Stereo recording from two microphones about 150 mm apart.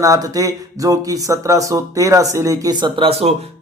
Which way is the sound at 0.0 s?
25° right (ahead or behind).